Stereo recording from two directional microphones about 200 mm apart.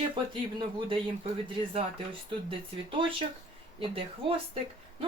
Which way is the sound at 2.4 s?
25° right (ahead or behind).